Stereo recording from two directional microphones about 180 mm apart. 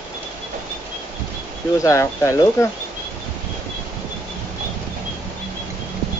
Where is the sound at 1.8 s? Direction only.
15° left (ahead or behind).